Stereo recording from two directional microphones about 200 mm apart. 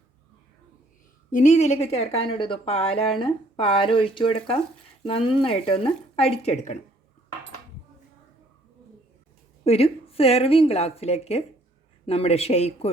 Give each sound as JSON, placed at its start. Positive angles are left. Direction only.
{"t": 1.3, "sound": "speech", "side_deg": 35}
{"t": 9.6, "sound": "a woman's voice", "side_deg": 30}